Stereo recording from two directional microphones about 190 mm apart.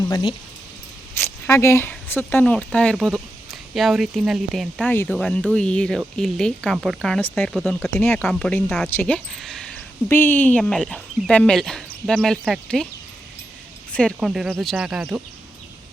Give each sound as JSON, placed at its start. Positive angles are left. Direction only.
{"t": 0.1, "sound": "speech", "side_deg": 25}
{"t": 1.1, "sound": "speech", "side_deg": 15}
{"t": 13.9, "sound": "speech", "side_deg": 0}